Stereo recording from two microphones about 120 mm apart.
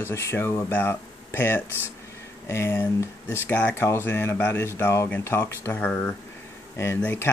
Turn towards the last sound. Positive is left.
turn(degrees=15)  # may be behind; listen again after turning